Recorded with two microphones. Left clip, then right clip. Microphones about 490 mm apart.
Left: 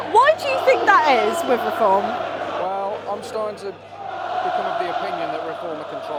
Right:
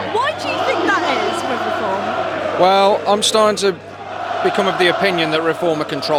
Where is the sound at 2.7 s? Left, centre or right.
Right.